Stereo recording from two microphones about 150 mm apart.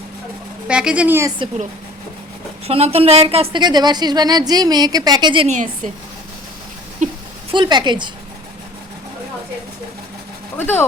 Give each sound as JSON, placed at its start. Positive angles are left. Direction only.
{"t": 0.7, "sound": "speech", "side_deg": -5}
{"t": 2.6, "sound": "a woman's voice", "side_deg": -45}
{"t": 5.5, "sound": "a woman's voice", "side_deg": -55}
{"t": 7.0, "sound": "a sound", "side_deg": -55}
{"t": 7.5, "sound": "speech", "side_deg": -30}